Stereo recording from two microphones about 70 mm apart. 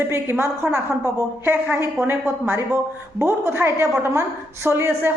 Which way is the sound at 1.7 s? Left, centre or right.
Right.